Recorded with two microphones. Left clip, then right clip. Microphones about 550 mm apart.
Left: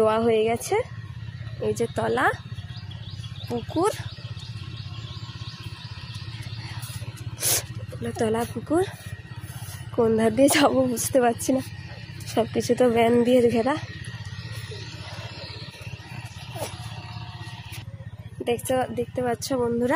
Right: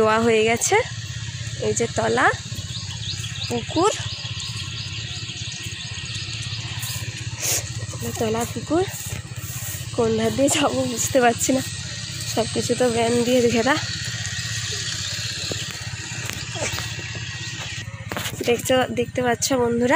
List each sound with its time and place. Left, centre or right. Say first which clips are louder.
0.0 s speech: right 3 dB; left
3.4 s speech: right 4 dB; left
7.4 s vehicle: right 2 dB; left
8.2 s speech: right 1 dB; left
9.9 s speech: even; left
11.5 s speech: right 3 dB; left
18.4 s speech: right 5 dB; left